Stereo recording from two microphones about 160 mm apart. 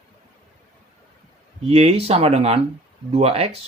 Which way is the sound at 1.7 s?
40° right (ahead or behind).